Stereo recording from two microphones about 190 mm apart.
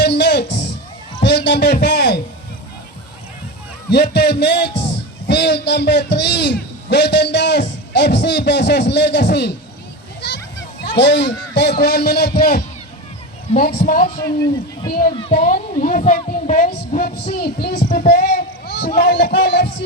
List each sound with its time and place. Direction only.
0.0 s music: 65° left (ahead or behind)
1.2 s a sound: 65° left (ahead or behind)
3.8 s a man's voice: 60° left (ahead or behind)
15.1 s speech: 25° left (ahead or behind)
15.4 s a woman's voice: 45° left (ahead or behind)
18.1 s a sound: 60° left (ahead or behind)
19.0 s music: 60° left (ahead or behind)